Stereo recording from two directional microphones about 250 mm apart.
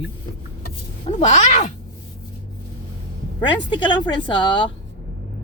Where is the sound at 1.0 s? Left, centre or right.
Left.